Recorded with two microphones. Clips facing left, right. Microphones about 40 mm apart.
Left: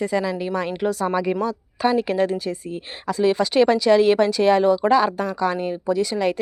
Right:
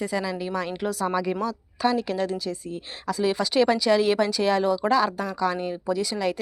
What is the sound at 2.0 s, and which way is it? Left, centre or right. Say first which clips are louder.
Speech: left 5 dB; left.